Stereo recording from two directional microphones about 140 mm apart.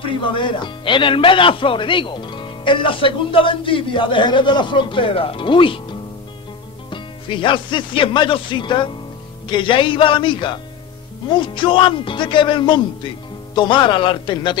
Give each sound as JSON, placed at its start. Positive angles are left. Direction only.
{"t": 0.0, "sound": "speech", "side_deg": 35}